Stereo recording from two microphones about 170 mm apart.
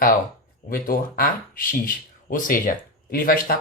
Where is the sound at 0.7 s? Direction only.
55° left (ahead or behind).